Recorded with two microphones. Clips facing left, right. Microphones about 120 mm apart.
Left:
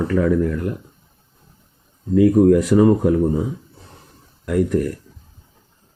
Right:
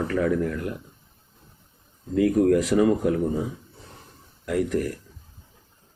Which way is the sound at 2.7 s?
55° left (ahead or behind).